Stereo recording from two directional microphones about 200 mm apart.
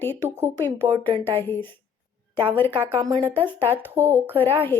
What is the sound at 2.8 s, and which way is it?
Speech, 20° right (ahead or behind).